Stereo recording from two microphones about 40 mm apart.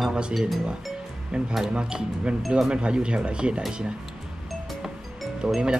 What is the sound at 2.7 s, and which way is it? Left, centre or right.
Speech, right.